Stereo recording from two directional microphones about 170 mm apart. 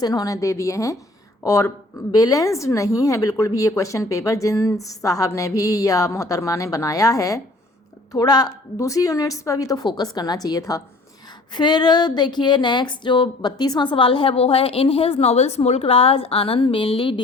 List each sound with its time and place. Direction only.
0.0 s a woman's voice: 20° left (ahead or behind)